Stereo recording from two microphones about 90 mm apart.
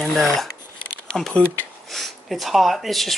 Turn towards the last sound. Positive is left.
turn(degrees=0)  # may be behind; listen again after turning